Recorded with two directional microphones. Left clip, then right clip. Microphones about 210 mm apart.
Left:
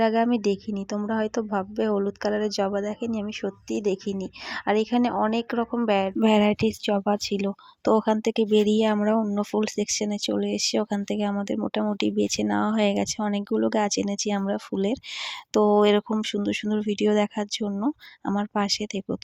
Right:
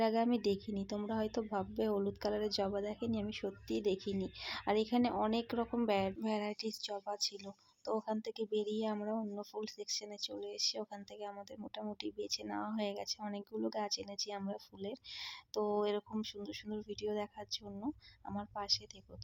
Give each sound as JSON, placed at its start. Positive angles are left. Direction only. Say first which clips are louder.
{"t": 0.0, "sound": "a woman's voice", "louder": "left 11 dB", "side_deg": 25}
{"t": 6.2, "sound": "a woman's voice", "louder": "left 18 dB", "side_deg": 40}